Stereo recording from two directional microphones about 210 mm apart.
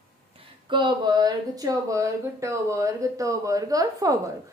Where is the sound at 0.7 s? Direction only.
20° right (ahead or behind).